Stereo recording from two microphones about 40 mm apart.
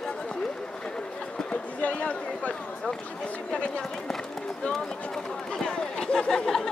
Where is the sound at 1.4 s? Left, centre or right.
Left.